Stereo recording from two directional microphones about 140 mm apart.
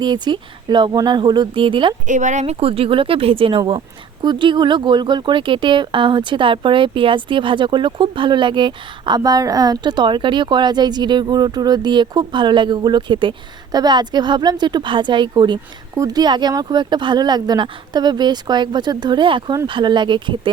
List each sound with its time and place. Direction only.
0.0 s speech: 30° right (ahead or behind)
2.0 s speech: 60° right (ahead or behind); by 20.5 s 35° right (ahead or behind)